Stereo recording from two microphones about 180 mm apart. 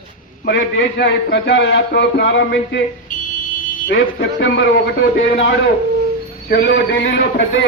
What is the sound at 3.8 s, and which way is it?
A man's voice, 65° left (ahead or behind).